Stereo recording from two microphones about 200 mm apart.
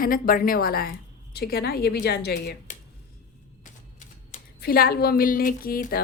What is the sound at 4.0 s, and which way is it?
A woman's voice, 45° left (ahead or behind).